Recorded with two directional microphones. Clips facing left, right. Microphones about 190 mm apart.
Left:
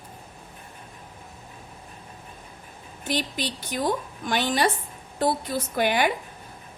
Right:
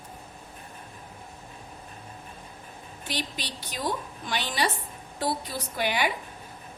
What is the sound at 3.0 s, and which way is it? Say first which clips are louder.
A woman's voice: left 7 dB; 50° left (ahead or behind).